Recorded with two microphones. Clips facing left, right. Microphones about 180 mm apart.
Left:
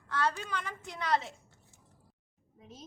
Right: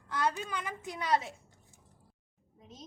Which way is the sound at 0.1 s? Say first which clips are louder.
Even; 15° right (ahead or behind).